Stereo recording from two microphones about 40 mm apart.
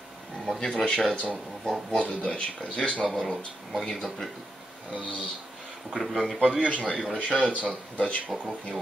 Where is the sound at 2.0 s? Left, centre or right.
Left.